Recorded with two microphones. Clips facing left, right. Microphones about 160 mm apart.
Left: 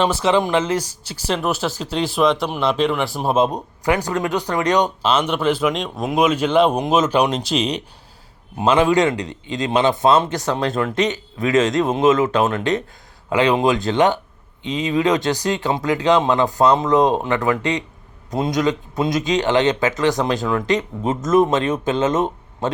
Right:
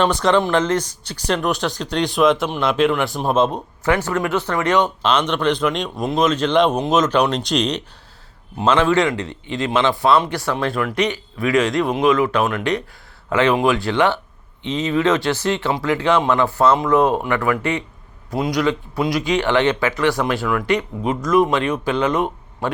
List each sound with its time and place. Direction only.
0.0 s speech: 5° left (ahead or behind)
5.0 s a man's voice: 5° left (ahead or behind); by 12.8 s 25° left (ahead or behind)
13.3 s a man's voice: 15° left (ahead or behind)